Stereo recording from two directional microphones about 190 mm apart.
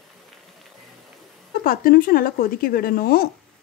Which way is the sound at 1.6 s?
50° left (ahead or behind).